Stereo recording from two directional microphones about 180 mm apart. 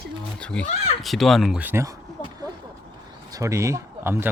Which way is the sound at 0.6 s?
35° left (ahead or behind).